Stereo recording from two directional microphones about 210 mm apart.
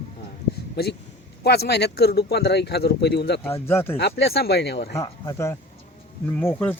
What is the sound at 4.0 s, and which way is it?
Speech, 50° left (ahead or behind).